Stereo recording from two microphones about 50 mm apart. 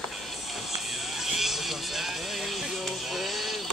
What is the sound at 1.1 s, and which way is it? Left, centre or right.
Music, centre.